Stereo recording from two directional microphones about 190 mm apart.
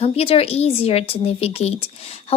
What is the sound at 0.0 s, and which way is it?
A woman's voice, 30° left (ahead or behind).